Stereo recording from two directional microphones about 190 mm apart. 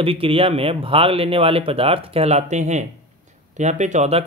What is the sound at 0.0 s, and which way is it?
Speech, 30° right (ahead or behind).